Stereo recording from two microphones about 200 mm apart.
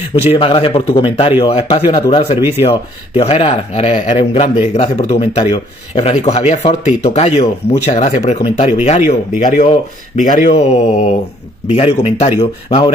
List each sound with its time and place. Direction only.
0.1 s speech: 30° left (ahead or behind)